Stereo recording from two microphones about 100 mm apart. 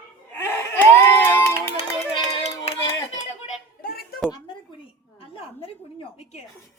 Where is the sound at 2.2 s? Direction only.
60° left (ahead or behind); by 2.7 s 80° left.